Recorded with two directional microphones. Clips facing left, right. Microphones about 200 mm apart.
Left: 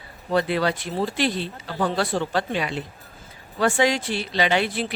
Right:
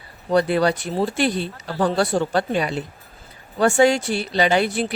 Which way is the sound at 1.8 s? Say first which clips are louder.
Right 4 dB; 45° right (ahead or behind).